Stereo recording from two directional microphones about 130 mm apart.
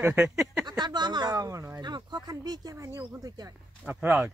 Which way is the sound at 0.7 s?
35° right (ahead or behind).